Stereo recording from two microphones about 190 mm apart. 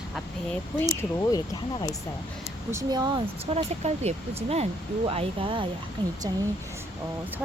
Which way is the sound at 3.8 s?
35° right (ahead or behind).